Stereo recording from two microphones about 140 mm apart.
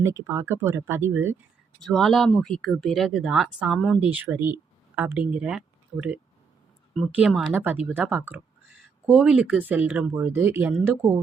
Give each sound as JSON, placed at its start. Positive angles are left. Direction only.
{"t": 0.0, "sound": "speech", "side_deg": -20}
{"t": 1.8, "sound": "speech", "side_deg": 0}
{"t": 4.1, "sound": "speech", "side_deg": -15}